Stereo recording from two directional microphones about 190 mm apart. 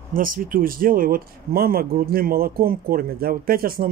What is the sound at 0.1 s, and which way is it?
Speech, 45° right (ahead or behind).